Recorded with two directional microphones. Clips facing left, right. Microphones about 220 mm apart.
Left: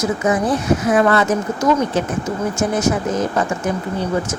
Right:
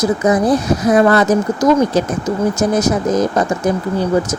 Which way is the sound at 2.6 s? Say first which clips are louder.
Right 3 dB; 40° right (ahead or behind).